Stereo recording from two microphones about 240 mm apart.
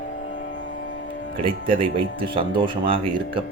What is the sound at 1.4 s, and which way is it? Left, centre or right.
Speech, right.